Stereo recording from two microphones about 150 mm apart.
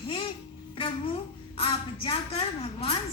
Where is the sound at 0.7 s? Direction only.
35° left (ahead or behind).